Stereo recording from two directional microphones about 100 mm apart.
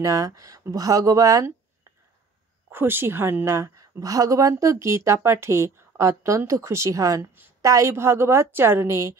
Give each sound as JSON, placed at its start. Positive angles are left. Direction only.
{"t": 0.0, "sound": "a woman's voice", "side_deg": -30}